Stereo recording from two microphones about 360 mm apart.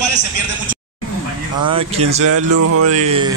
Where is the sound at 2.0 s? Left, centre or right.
Centre.